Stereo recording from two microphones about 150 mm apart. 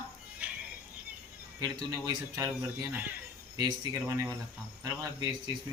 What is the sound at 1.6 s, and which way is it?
Speech, 25° right (ahead or behind).